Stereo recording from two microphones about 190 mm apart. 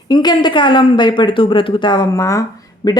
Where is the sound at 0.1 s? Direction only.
25° left (ahead or behind).